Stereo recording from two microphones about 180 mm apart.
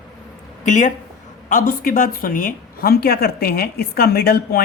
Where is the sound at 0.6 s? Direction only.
45° left (ahead or behind).